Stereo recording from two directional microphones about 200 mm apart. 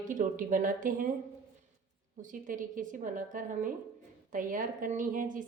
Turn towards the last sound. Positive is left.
turn(degrees=-40)  # may be behind; listen again after turning